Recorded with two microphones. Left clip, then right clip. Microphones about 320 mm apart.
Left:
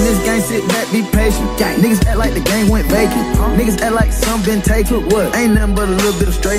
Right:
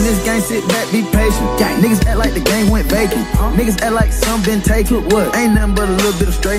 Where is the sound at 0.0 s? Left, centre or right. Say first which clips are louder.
Left 1 dB; centre.